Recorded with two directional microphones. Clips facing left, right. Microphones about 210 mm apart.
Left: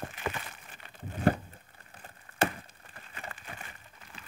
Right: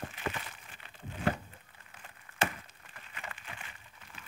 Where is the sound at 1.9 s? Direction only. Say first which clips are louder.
Left 3 dB; 35° left (ahead or behind).